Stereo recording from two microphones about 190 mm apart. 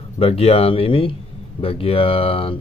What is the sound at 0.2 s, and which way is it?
Speech, 30° left (ahead or behind).